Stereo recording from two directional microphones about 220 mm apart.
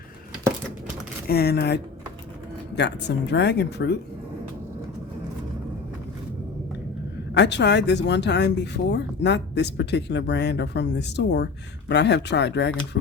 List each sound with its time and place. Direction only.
1.3 s speech: 45° left (ahead or behind)
7.3 s speech: 50° left (ahead or behind)